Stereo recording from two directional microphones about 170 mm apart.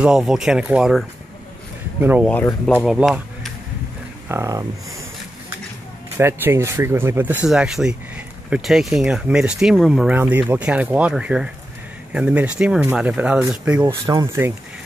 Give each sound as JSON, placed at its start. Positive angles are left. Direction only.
{"t": 0.0, "sound": "speech", "side_deg": -5}
{"t": 2.2, "sound": "speech", "side_deg": 5}
{"t": 4.3, "sound": "speech", "side_deg": -20}
{"t": 6.1, "sound": "speech", "side_deg": -15}
{"t": 13.8, "sound": "speech", "side_deg": -20}